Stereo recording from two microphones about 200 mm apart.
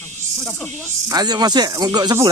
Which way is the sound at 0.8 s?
20° right (ahead or behind).